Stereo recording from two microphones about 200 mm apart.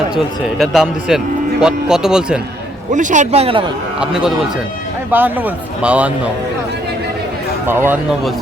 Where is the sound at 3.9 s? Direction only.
5° right (ahead or behind).